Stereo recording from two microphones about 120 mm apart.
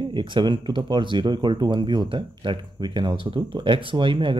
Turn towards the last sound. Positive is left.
turn(degrees=-45)  # may be behind; listen again after turning